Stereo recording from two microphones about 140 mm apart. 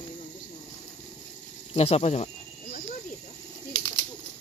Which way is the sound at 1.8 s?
50° left (ahead or behind).